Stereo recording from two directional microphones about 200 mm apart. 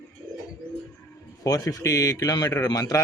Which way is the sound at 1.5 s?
20° left (ahead or behind).